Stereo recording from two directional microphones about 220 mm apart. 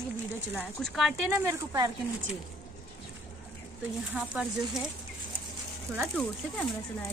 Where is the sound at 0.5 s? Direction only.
5° right (ahead or behind).